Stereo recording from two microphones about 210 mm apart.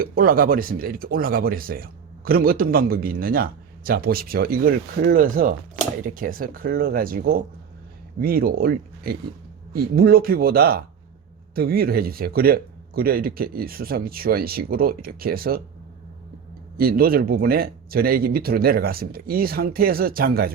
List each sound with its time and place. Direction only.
0.0 s speech: 45° right (ahead or behind)
16.7 s speech: 45° right (ahead or behind)